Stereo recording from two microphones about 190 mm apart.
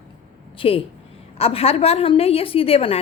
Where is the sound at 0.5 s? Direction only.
30° left (ahead or behind).